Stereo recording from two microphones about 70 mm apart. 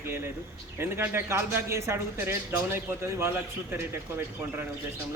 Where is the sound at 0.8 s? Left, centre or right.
Right.